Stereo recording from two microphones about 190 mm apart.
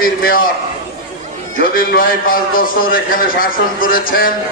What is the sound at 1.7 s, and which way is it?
A man's voice, 50° left (ahead or behind).